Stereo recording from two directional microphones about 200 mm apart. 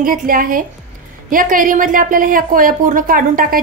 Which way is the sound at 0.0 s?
45° right (ahead or behind).